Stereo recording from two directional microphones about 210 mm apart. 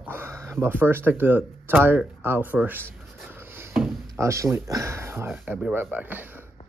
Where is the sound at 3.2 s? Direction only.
10° right (ahead or behind).